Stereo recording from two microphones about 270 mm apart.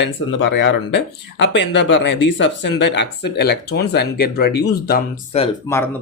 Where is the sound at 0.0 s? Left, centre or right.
Left.